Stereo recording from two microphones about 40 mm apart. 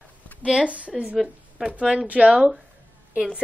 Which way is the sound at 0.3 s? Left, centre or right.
Left.